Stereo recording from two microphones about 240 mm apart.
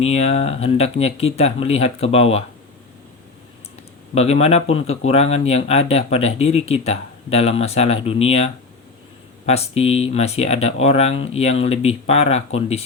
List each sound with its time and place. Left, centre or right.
0.0 s speech: left
4.1 s speech: left
9.5 s speech: left